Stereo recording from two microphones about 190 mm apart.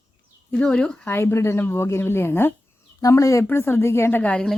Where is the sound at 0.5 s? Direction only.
5° left (ahead or behind).